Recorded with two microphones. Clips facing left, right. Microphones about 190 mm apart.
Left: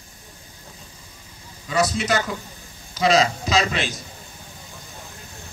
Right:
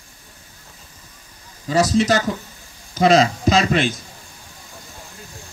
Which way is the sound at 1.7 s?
40° right (ahead or behind).